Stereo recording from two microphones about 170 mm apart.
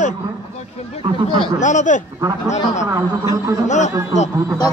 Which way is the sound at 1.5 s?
45° left (ahead or behind).